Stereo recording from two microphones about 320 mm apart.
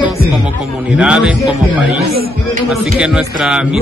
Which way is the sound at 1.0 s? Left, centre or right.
Centre.